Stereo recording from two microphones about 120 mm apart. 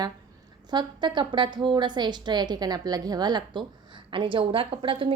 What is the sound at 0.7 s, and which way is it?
A woman's voice, 40° right (ahead or behind).